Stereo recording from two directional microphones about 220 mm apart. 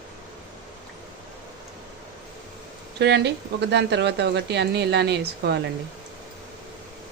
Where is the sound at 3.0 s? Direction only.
50° right (ahead or behind).